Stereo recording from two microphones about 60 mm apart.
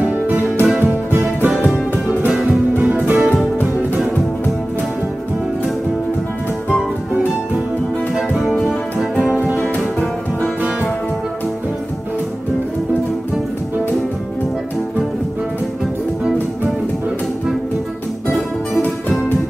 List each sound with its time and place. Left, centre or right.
0.0 s music: right
8.6 s music: centre